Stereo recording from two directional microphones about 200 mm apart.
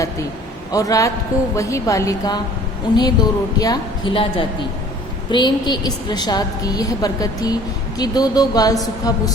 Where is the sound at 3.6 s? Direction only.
20° left (ahead or behind).